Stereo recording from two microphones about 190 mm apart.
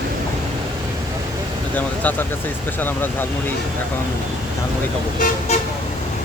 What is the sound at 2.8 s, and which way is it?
Speech, 10° left (ahead or behind).